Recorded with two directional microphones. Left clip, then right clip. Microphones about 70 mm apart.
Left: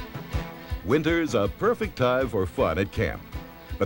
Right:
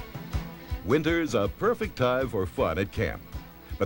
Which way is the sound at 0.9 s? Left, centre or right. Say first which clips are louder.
Left 2 dB; left.